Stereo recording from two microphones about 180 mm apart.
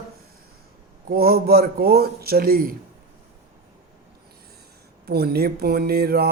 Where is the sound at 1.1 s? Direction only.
55° right (ahead or behind).